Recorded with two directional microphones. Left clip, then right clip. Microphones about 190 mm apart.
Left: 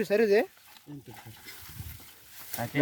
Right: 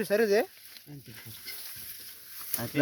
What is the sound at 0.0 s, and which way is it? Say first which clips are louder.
Speech: left 1 dB; 20° left (ahead or behind).